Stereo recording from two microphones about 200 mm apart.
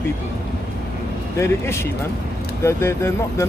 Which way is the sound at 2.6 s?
15° left (ahead or behind).